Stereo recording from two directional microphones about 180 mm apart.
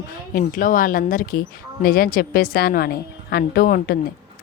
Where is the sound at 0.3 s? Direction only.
50° left (ahead or behind).